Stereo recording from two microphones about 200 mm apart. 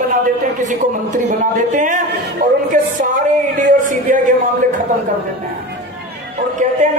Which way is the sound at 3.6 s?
40° right (ahead or behind).